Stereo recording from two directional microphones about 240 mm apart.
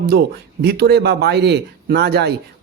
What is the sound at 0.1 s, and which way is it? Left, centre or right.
A man's voice, right.